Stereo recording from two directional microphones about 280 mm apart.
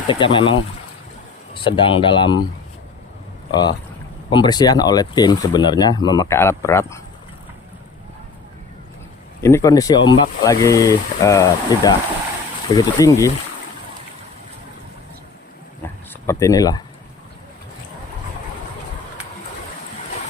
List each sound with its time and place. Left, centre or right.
0.1 s speech: centre
1.5 s speech: centre
3.5 s speech: centre
9.4 s speech: centre
15.8 s a sound: centre